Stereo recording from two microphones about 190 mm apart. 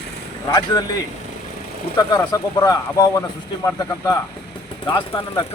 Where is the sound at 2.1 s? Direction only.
20° left (ahead or behind).